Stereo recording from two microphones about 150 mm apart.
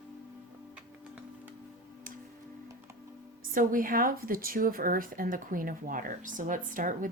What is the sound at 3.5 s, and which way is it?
A woman's voice, 70° right (ahead or behind).